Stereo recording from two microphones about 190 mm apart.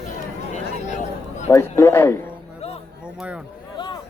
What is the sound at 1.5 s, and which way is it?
Speech, 15° left (ahead or behind).